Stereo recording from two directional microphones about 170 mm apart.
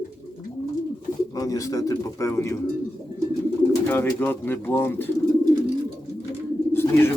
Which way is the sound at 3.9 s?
10° left (ahead or behind).